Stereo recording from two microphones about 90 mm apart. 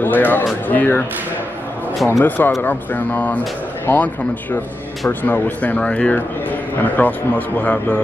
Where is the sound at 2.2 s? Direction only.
20° left (ahead or behind).